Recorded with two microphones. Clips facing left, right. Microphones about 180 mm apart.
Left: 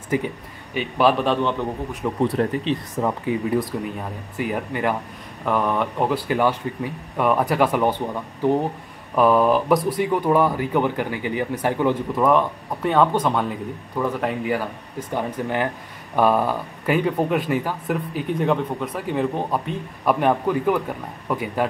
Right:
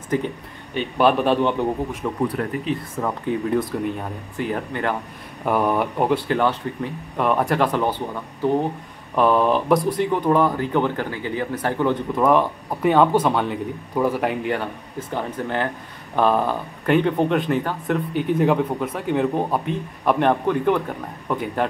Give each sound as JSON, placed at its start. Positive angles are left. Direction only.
{"t": 0.1, "sound": "speech", "side_deg": 10}
{"t": 2.4, "sound": "speech", "side_deg": 30}
{"t": 3.0, "sound": "speech", "side_deg": 10}
{"t": 5.4, "sound": "speech", "side_deg": -10}
{"t": 9.1, "sound": "speech", "side_deg": 5}
{"t": 12.2, "sound": "speech", "side_deg": 0}